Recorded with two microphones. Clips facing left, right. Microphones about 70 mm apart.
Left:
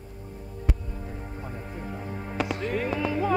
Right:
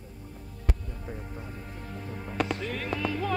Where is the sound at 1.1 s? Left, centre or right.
Centre.